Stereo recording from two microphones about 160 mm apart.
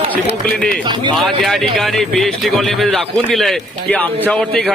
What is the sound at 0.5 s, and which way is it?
Speech, 5° left (ahead or behind).